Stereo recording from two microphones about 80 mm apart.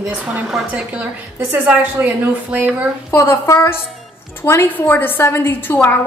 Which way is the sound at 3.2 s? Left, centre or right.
Left.